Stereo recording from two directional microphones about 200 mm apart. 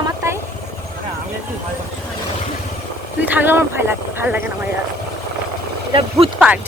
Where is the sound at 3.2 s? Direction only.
10° right (ahead or behind).